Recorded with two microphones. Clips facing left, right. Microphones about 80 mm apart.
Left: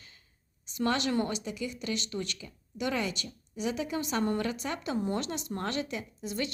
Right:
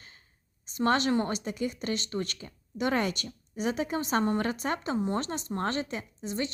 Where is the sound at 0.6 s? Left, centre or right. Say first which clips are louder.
Right 4 dB; right.